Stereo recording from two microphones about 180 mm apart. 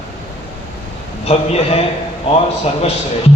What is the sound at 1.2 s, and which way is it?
Speech, 35° left (ahead or behind).